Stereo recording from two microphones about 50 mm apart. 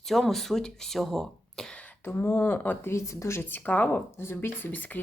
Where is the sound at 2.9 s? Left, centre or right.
Left.